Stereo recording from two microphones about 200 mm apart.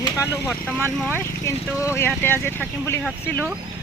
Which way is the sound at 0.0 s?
15° left (ahead or behind).